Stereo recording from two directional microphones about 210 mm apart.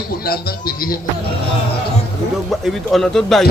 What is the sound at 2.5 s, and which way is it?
Speech, centre (ahead or behind).